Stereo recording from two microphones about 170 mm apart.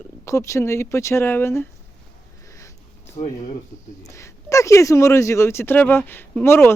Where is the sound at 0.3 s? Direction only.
15° left (ahead or behind).